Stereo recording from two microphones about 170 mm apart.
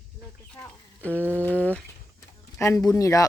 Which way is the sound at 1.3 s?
10° left (ahead or behind).